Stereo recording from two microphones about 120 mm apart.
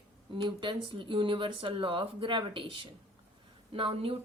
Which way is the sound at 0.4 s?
40° right (ahead or behind).